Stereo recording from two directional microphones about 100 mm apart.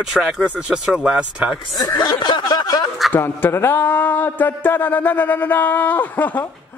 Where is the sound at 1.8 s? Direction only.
45° left (ahead or behind).